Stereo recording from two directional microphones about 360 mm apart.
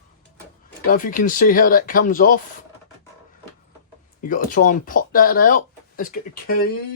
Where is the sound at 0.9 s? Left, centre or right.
Left.